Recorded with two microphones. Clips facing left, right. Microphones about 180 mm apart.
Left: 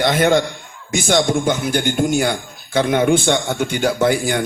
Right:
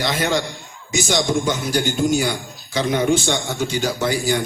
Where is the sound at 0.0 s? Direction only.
55° left (ahead or behind).